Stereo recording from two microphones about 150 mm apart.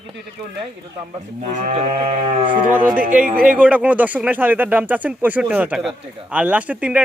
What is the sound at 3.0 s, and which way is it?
Speech, 60° right (ahead or behind).